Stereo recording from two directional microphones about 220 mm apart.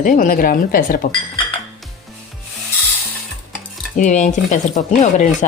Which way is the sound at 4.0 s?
30° left (ahead or behind).